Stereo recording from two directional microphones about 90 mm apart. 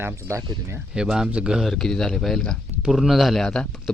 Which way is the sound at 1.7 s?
5° left (ahead or behind).